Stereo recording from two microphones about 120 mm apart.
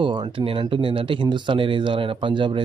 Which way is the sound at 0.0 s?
45° right (ahead or behind).